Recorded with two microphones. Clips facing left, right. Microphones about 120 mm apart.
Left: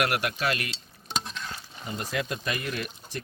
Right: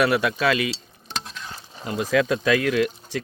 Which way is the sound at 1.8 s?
90° right.